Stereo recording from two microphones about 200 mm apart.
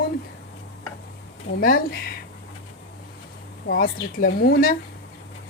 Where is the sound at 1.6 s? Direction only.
45° left (ahead or behind).